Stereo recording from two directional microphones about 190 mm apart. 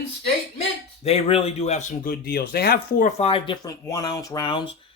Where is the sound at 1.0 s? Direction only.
30° left (ahead or behind).